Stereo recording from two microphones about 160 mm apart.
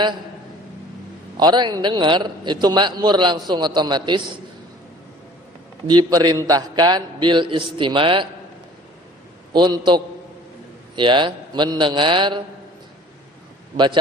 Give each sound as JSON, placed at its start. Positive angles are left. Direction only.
{"t": 1.4, "sound": "a man's voice", "side_deg": -30}
{"t": 5.9, "sound": "a man's voice", "side_deg": -25}
{"t": 9.5, "sound": "a man's voice", "side_deg": -25}
{"t": 13.7, "sound": "a man's voice", "side_deg": -30}